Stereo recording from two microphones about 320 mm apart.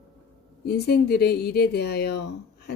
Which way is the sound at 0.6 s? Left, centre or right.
Left.